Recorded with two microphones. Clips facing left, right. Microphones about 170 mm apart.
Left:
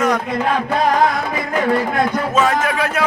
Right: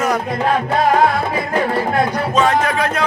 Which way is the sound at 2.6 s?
5° left (ahead or behind).